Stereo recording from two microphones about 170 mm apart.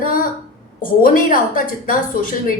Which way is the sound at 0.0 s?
55° left (ahead or behind).